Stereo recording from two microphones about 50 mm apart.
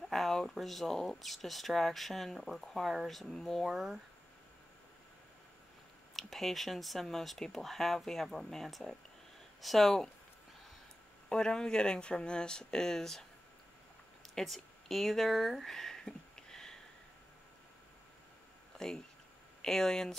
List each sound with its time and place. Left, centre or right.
0.1 s speech: centre
6.1 s speech: centre
11.2 s speech: centre
14.3 s a sound: centre
18.8 s speech: centre